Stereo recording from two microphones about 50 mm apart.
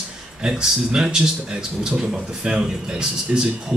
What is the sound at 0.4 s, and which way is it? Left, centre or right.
Speech, centre.